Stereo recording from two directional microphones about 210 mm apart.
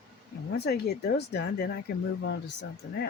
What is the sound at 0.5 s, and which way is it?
Speech, 50° left (ahead or behind).